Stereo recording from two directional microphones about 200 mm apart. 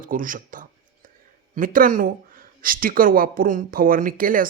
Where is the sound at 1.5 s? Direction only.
45° right (ahead or behind).